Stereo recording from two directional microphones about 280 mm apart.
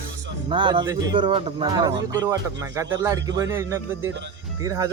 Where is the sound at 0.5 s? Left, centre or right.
Centre.